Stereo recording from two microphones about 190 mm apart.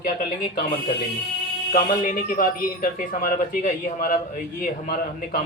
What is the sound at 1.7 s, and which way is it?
A man's voice, 45° left (ahead or behind).